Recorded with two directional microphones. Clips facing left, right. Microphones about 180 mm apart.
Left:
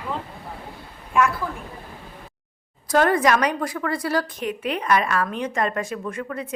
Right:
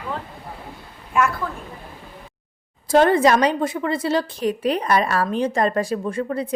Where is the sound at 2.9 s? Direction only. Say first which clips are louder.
Right 3 dB; 25° right (ahead or behind).